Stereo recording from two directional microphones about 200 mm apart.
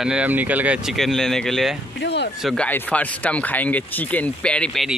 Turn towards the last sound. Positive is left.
turn(degrees=0)  # may be behind; listen again after turning